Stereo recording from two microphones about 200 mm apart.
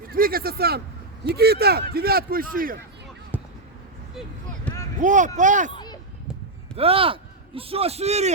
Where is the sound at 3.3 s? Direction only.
10° right (ahead or behind).